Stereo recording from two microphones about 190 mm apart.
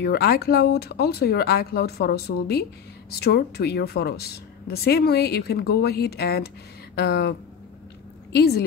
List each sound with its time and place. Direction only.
0.0 s a woman's voice: 55° left (ahead or behind)